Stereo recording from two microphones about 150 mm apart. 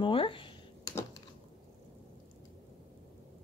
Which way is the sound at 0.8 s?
20° left (ahead or behind).